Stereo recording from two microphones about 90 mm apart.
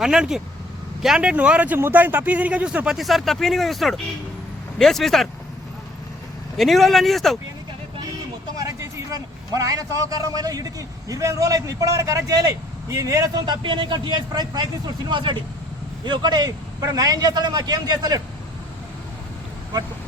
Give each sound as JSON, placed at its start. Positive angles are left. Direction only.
{"t": 0.0, "sound": "speech", "side_deg": -5}
{"t": 6.6, "sound": "speech", "side_deg": 0}
{"t": 8.5, "sound": "a man's voice", "side_deg": -35}
{"t": 13.4, "sound": "a man's voice", "side_deg": -60}
{"t": 16.5, "sound": "a man's voice", "side_deg": -40}